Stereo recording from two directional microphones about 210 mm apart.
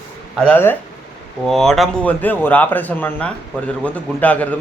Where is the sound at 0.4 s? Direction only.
10° left (ahead or behind).